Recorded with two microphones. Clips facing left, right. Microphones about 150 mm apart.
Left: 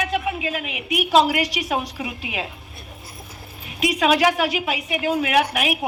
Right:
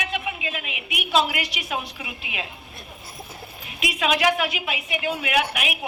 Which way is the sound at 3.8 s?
40° left (ahead or behind).